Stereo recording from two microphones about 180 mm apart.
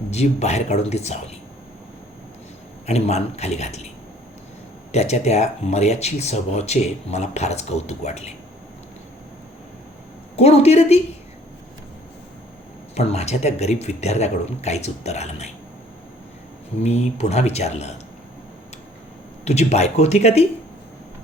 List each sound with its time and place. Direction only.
0.1 s speech: 40° left (ahead or behind)
2.8 s speech: 35° left (ahead or behind)
4.9 s speech: 40° left (ahead or behind)
10.3 s speech: 35° left (ahead or behind)
12.9 s speech: 35° left (ahead or behind)
16.8 s speech: 35° left (ahead or behind)
19.5 s speech: 35° left (ahead or behind)